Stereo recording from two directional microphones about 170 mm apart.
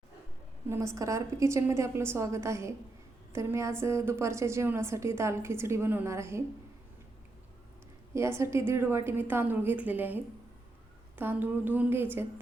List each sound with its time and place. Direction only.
0.7 s a woman's voice: 20° right (ahead or behind)
8.1 s a woman's voice: 15° right (ahead or behind)